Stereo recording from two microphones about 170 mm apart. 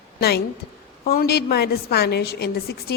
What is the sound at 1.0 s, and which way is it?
A woman's voice, 65° left (ahead or behind).